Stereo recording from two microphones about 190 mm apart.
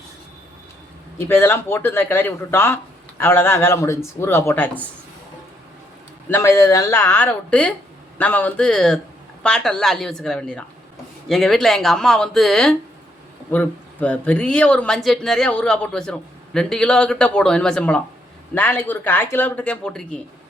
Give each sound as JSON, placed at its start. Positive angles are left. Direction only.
{"t": 1.3, "sound": "speech", "side_deg": 15}
{"t": 6.2, "sound": "speech", "side_deg": 10}